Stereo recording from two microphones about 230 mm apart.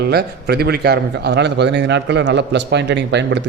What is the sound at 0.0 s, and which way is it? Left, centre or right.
A man's voice, right.